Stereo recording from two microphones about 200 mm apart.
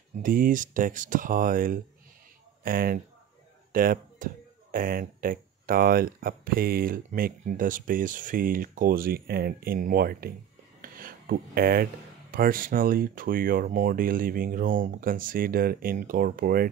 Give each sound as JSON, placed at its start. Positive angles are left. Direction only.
{"t": 0.2, "sound": "speech", "side_deg": -45}